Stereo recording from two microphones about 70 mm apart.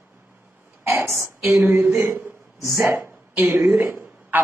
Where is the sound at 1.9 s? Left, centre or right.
Right.